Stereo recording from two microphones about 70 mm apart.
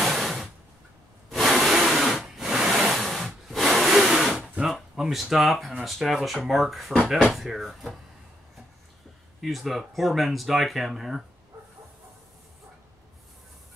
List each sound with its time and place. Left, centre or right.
0.0 s a sound: centre
4.7 s speech: centre
9.4 s speech: centre